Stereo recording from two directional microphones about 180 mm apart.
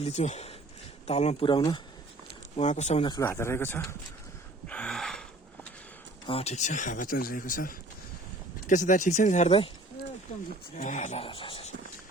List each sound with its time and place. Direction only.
0.0 s speech: 40° left (ahead or behind)
2.6 s speech: 40° left (ahead or behind)
3.1 s speech: 15° left (ahead or behind)
4.7 s gasp: 5° left (ahead or behind)
6.2 s speech: 35° left (ahead or behind)
10.8 s speech: 45° left (ahead or behind)